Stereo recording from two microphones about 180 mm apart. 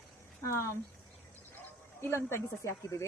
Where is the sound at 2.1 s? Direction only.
15° left (ahead or behind).